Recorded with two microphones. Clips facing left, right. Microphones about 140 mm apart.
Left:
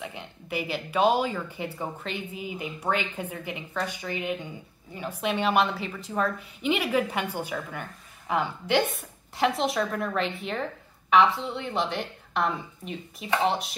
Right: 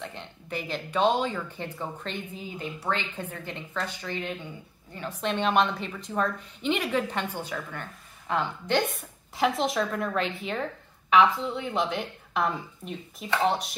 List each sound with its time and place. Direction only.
0.0 s speech: 5° left (ahead or behind)